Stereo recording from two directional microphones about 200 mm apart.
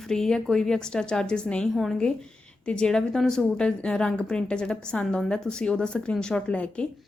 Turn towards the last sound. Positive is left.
turn(degrees=5)  # may be behind; listen again after turning